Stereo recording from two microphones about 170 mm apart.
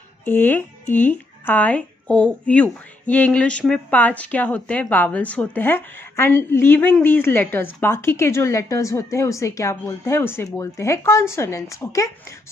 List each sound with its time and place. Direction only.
0.2 s speech: 10° left (ahead or behind)